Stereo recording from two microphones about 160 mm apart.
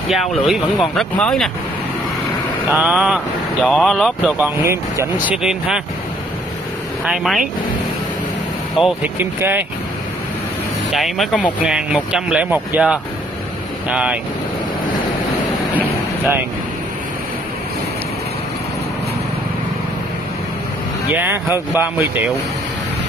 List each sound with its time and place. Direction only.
0.1 s speech: centre (ahead or behind)
2.7 s speech: 10° right (ahead or behind)
4.4 s speech: 15° right (ahead or behind)
5.3 s speech: 5° right (ahead or behind)
7.1 s speech: centre (ahead or behind)
8.7 s speech: centre (ahead or behind)
9.2 s speech: 15° right (ahead or behind)
10.9 s speech: centre (ahead or behind)
11.6 s speech: 5° right (ahead or behind)
21.1 s speech: 10° right (ahead or behind)